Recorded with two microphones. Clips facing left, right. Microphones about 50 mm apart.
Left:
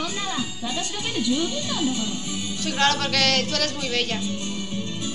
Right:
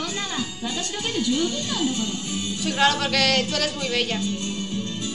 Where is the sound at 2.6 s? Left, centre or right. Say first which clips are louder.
Right 1 dB; centre.